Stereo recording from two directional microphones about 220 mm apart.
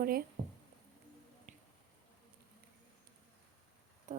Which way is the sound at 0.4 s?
35° right (ahead or behind).